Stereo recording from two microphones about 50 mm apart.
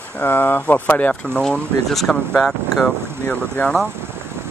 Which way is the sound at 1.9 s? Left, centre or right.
Centre.